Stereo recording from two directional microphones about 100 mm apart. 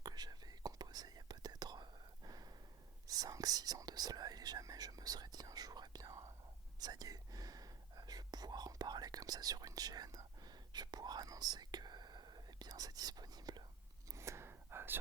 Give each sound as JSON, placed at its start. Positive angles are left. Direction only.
{"t": 0.0, "sound": "whispering", "side_deg": -45}
{"t": 14.1, "sound": "whispering", "side_deg": -30}